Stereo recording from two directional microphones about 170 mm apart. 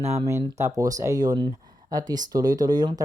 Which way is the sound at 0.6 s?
20° right (ahead or behind).